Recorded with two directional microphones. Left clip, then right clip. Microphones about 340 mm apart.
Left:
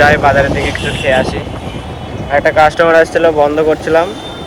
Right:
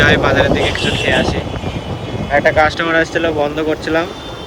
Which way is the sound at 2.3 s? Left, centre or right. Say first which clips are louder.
Left 3 dB; left.